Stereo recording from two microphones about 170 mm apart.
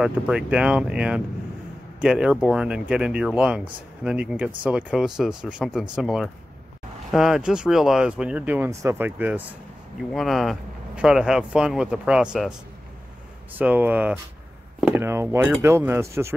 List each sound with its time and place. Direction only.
0.0 s speech: 5° right (ahead or behind)
13.6 s speech: 10° right (ahead or behind)